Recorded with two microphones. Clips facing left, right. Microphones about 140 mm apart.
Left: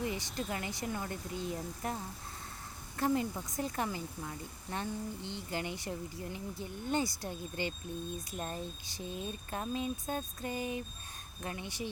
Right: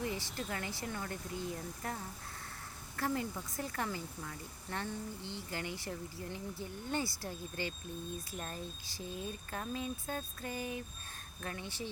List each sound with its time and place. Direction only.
0.0 s speech: 15° left (ahead or behind)
3.0 s speech: 20° left (ahead or behind)